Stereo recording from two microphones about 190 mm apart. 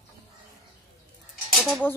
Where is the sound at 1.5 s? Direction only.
Centre (ahead or behind).